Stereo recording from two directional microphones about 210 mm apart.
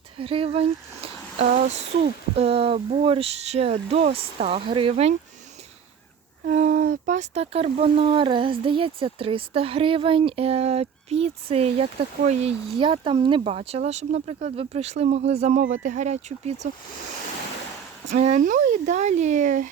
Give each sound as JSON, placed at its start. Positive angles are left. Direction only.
{"t": 0.2, "sound": "speech", "side_deg": -25}
{"t": 6.4, "sound": "speech", "side_deg": -40}
{"t": 18.1, "sound": "speech", "side_deg": -35}